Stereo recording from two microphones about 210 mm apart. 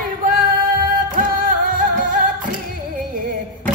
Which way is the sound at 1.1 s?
40° right (ahead or behind).